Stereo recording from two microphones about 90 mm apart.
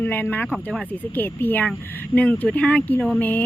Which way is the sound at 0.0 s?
20° left (ahead or behind).